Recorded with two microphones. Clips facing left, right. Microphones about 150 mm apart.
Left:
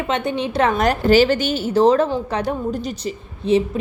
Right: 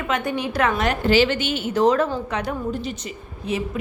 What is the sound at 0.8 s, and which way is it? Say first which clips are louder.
A woman's voice: left 5 dB; 40° left (ahead or behind).